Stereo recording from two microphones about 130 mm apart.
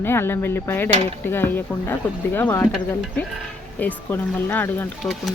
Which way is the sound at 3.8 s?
15° left (ahead or behind).